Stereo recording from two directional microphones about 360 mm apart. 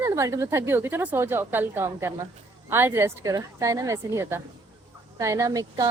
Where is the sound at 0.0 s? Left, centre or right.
Centre.